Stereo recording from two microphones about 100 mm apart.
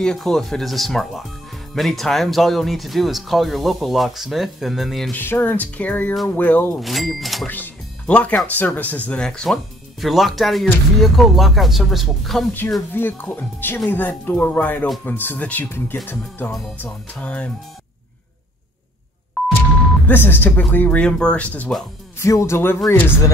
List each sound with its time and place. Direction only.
0.0 s speech: 5° left (ahead or behind)
5.1 s speech: 20° left (ahead or behind)
6.8 s speech: centre (ahead or behind)
7.4 s music: 20° left (ahead or behind)
8.5 s speech: 15° left (ahead or behind); by 12.4 s centre (ahead or behind)
12.9 s speech: 20° left (ahead or behind)
19.4 s a sound: centre (ahead or behind)
20.1 s speech: 20° left (ahead or behind)
22.2 s speech: 30° left (ahead or behind)